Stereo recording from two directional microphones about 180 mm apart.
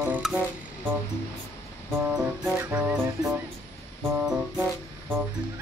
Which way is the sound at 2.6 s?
10° right (ahead or behind).